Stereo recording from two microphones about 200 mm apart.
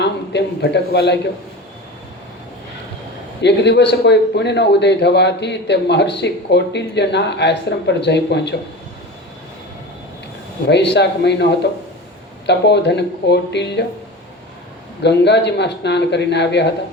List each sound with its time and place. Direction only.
0.0 s a man's voice: 60° left (ahead or behind)
3.4 s a man's voice: 60° left (ahead or behind)
10.7 s a man's voice: 60° left (ahead or behind)
15.0 s a man's voice: 60° left (ahead or behind)